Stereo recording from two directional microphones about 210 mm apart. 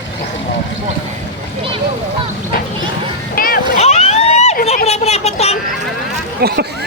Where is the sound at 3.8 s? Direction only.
30° left (ahead or behind).